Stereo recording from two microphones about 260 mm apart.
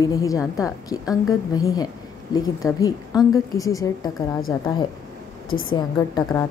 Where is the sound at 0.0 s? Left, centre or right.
Centre.